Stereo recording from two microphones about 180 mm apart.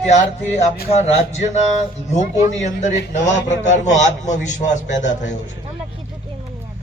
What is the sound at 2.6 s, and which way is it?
Speech, 45° left (ahead or behind).